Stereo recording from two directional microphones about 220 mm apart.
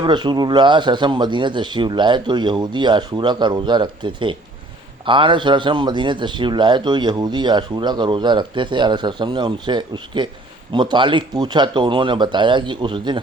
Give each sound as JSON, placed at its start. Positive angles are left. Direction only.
{"t": 0.0, "sound": "a man's voice", "side_deg": -20}